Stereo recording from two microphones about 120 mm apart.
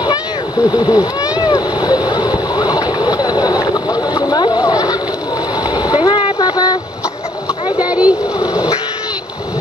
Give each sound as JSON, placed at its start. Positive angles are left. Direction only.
{"t": 0.7, "sound": "speech", "side_deg": 35}
{"t": 1.4, "sound": "boat", "side_deg": 35}
{"t": 5.6, "sound": "vehicle", "side_deg": 35}
{"t": 7.8, "sound": "splash", "side_deg": -10}
{"t": 8.4, "sound": "a sound", "side_deg": 30}